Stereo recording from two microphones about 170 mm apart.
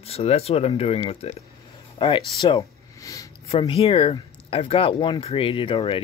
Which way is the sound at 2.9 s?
20° left (ahead or behind).